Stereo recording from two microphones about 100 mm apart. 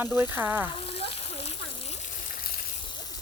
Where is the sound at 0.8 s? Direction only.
75° left (ahead or behind); by 2.0 s 90° left.